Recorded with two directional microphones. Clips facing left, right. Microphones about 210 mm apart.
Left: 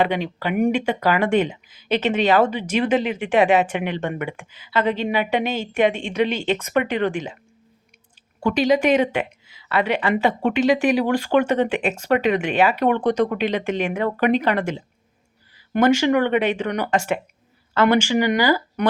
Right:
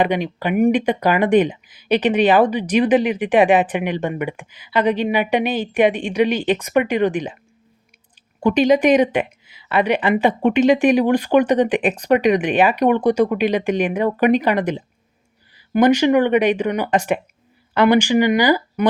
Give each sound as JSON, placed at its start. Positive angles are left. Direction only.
{"t": 0.0, "sound": "speech", "side_deg": -15}
{"t": 8.4, "sound": "speech", "side_deg": -20}